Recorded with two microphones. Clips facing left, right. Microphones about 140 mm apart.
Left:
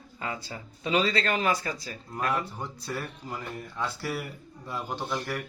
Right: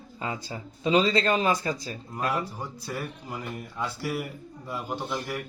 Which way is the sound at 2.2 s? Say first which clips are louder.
Right 1 dB; 10° right (ahead or behind).